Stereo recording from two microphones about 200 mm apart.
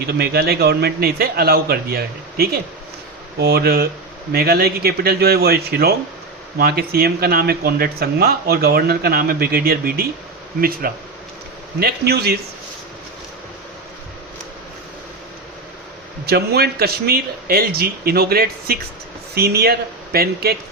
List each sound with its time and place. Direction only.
0.1 s speech: 50° right (ahead or behind)
16.2 s speech: 55° right (ahead or behind)